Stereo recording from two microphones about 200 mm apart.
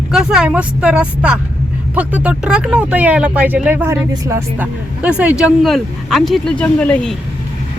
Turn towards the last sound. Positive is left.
turn(degrees=5)  # may be behind; listen again after turning